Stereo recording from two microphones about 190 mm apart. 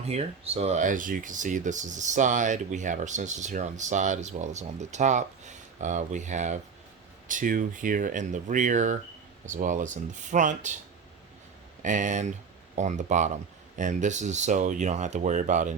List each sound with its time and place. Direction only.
0.1 s speech: 35° right (ahead or behind)
11.8 s speech: 40° right (ahead or behind)